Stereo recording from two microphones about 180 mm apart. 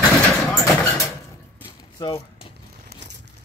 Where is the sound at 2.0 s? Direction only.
20° left (ahead or behind).